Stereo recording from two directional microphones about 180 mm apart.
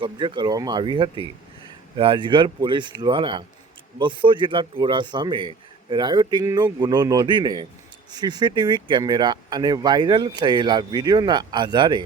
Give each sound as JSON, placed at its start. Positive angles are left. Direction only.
{"t": 0.0, "sound": "speech", "side_deg": -25}